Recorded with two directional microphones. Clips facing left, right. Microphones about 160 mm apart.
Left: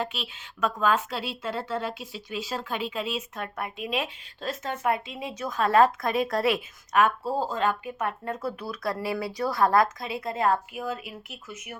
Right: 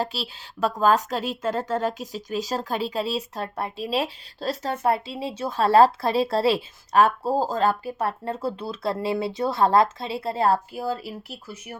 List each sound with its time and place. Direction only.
0.0 s a woman's voice: 35° right (ahead or behind)